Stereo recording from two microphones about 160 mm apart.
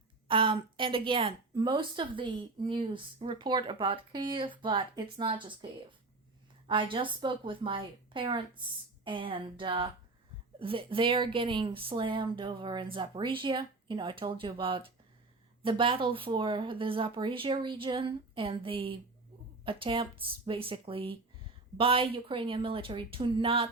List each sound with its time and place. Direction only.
0.3 s a woman's voice: 30° right (ahead or behind)